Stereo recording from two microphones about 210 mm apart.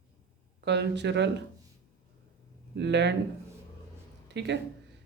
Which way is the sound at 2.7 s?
55° right (ahead or behind).